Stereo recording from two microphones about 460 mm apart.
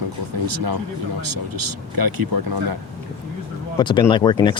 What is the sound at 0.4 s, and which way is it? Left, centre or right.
Speech, right.